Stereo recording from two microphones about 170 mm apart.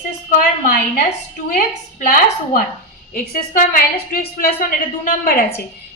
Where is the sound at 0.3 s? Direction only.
50° left (ahead or behind).